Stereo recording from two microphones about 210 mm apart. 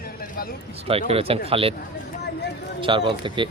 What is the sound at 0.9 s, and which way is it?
Speech, 30° right (ahead or behind).